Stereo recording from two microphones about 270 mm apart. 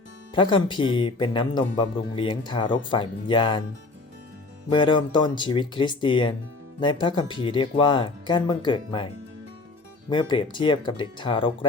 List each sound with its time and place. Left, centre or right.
0.3 s speech: centre
4.7 s speech: centre
10.1 s speech: centre